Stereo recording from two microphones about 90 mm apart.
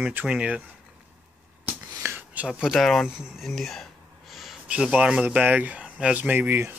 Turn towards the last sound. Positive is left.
turn(degrees=-25)  # may be behind; listen again after turning